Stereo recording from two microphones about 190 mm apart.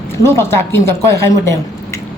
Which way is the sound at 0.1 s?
15° left (ahead or behind).